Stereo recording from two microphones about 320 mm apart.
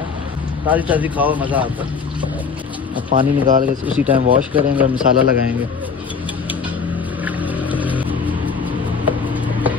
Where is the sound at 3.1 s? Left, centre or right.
Right.